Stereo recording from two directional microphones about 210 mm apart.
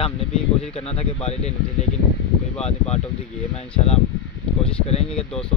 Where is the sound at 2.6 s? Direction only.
30° left (ahead or behind).